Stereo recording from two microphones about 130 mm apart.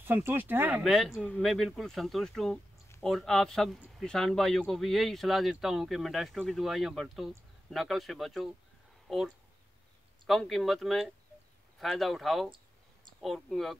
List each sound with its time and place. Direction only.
0.0 s speech: 15° right (ahead or behind)
0.8 s speech: centre (ahead or behind)